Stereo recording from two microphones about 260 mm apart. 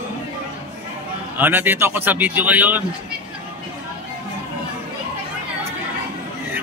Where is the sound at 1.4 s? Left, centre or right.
Centre.